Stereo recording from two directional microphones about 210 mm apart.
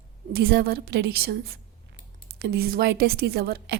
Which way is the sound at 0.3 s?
50° right (ahead or behind).